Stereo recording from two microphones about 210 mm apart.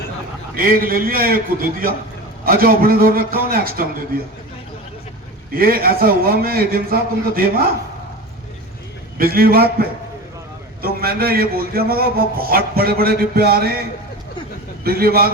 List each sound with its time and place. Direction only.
0.5 s a man's voice: 45° right (ahead or behind)
2.4 s a man's voice: 45° right (ahead or behind)
5.5 s a man's voice: 45° right (ahead or behind)
9.1 s a man's voice: 45° right (ahead or behind)
10.8 s a man's voice: 45° right (ahead or behind)
14.8 s a man's voice: 45° right (ahead or behind)